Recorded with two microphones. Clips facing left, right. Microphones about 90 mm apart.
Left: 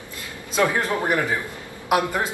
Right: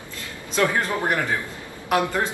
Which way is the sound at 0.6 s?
15° left (ahead or behind).